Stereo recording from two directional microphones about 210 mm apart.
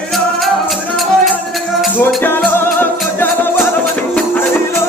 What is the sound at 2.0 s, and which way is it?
Music, 10° left (ahead or behind).